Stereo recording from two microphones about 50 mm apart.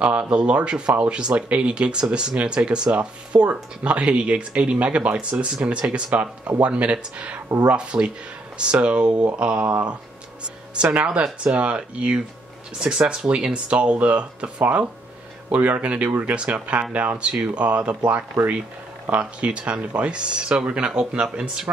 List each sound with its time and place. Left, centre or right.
0.0 s speech: right
17.2 s speech: right